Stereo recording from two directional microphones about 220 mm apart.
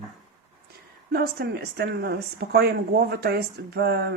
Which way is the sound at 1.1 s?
45° right (ahead or behind).